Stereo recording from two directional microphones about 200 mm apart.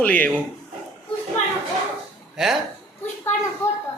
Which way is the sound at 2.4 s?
Centre (ahead or behind).